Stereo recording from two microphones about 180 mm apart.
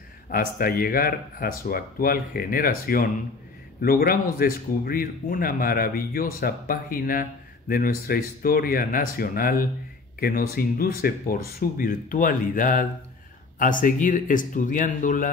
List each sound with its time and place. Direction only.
0.3 s speech: 55° left (ahead or behind)